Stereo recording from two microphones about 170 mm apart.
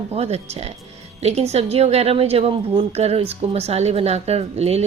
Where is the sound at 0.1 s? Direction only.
40° right (ahead or behind).